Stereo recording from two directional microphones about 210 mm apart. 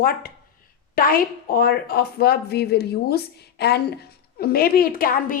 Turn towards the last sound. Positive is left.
turn(degrees=40)  # may be behind; listen again after turning